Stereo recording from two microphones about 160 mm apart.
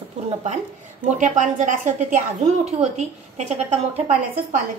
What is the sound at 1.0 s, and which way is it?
A woman's voice, 50° right (ahead or behind).